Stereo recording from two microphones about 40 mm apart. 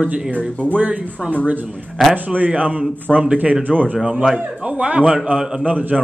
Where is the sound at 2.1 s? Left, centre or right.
Right.